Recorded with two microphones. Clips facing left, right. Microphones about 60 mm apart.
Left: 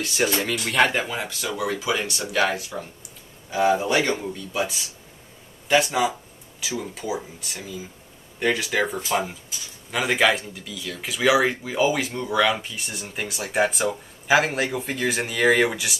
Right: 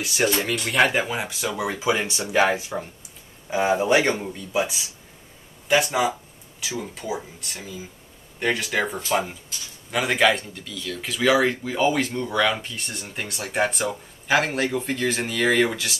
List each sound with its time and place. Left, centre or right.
0.0 s speech: centre